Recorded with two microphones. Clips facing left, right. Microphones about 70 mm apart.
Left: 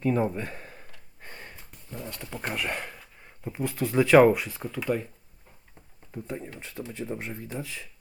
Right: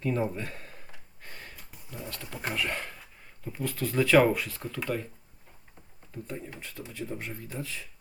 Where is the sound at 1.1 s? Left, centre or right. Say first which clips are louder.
Left 2 dB; centre.